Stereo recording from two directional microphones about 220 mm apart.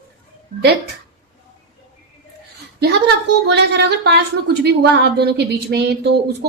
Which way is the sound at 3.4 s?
50° right (ahead or behind).